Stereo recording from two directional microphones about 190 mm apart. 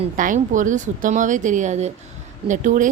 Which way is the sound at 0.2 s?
45° right (ahead or behind).